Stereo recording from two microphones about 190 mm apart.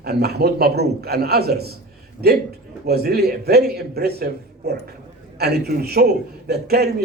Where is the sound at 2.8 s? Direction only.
55° right (ahead or behind).